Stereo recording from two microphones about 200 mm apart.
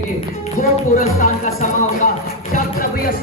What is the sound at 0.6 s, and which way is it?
Speech, 40° left (ahead or behind).